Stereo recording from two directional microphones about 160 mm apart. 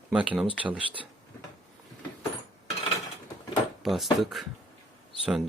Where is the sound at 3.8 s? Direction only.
Centre (ahead or behind).